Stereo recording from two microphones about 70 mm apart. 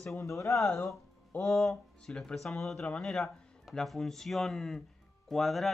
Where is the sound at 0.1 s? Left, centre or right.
Left.